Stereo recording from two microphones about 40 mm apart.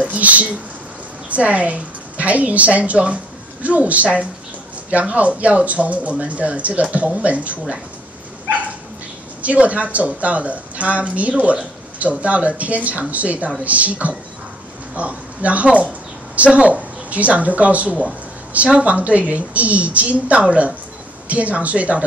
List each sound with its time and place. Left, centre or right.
0.0 s a woman's voice: right
9.4 s speech: right